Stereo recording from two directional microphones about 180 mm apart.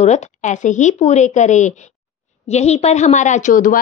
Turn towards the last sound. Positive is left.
turn(degrees=45)  # may be behind; listen again after turning